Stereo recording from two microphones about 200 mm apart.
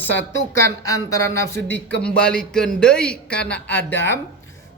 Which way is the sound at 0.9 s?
15° left (ahead or behind).